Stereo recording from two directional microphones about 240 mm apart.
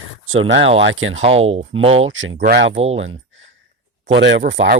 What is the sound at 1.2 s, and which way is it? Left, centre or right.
Speech, right.